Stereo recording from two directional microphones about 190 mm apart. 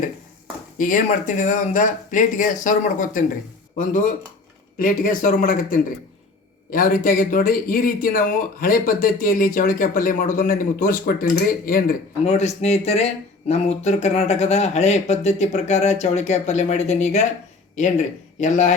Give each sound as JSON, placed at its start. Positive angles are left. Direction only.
{"t": 0.8, "sound": "speech", "side_deg": 40}
{"t": 12.2, "sound": "speech", "side_deg": 35}